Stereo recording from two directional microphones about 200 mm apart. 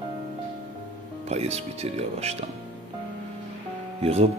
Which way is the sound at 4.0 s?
30° right (ahead or behind).